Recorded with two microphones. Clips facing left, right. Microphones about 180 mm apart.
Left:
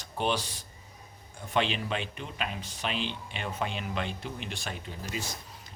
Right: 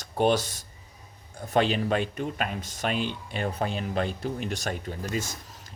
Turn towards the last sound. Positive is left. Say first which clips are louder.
# right 6 dB
turn(degrees=-50)  # may be behind; listen again after turning